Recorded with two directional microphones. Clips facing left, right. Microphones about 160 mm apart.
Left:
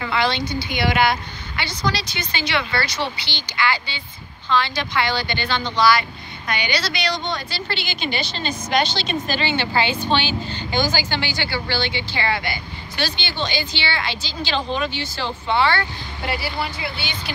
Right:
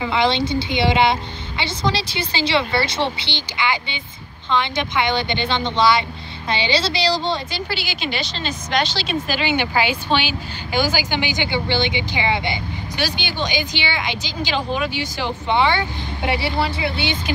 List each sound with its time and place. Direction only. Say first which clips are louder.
0.0 s a woman's voice: right 3 dB; 20° right (ahead or behind)
7.5 s a woman's voice: right 2 dB; 5° right (ahead or behind); by 17.1 s 25° right (ahead or behind)